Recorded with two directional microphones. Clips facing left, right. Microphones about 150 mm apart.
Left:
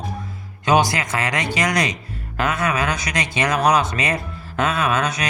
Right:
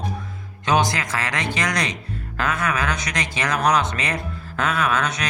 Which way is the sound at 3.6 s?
10° left (ahead or behind).